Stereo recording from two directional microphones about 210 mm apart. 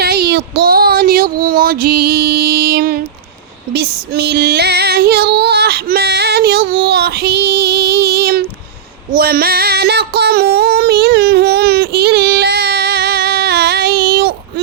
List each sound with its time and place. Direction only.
0.0 s child singing: 50° right (ahead or behind)
1.5 s music: 45° right (ahead or behind)
3.7 s female singing: 50° right (ahead or behind)
6.8 s child singing: 50° right (ahead or behind)
9.1 s music: 45° right (ahead or behind)
10.2 s a sound: 50° right (ahead or behind)